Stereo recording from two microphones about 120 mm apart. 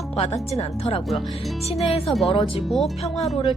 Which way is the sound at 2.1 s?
Centre (ahead or behind).